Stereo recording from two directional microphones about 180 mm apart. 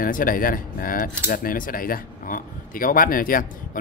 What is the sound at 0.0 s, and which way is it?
Speech, 50° left (ahead or behind).